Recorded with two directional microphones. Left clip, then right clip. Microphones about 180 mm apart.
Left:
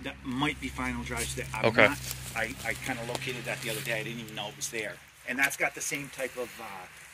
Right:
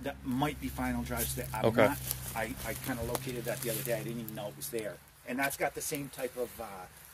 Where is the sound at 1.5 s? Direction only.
15° right (ahead or behind).